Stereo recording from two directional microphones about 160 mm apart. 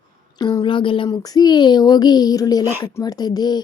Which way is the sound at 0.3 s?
25° left (ahead or behind).